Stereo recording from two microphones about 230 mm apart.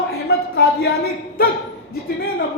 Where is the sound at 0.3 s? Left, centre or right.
Left.